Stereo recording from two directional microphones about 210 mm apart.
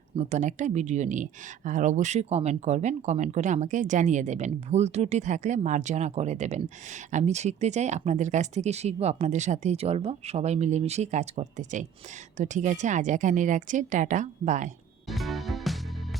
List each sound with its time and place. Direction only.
0.2 s speech: 35° right (ahead or behind)
15.0 s music: centre (ahead or behind)